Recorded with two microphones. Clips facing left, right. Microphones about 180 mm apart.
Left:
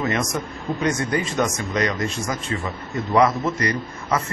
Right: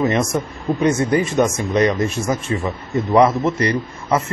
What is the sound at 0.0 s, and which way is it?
Speech, 25° right (ahead or behind).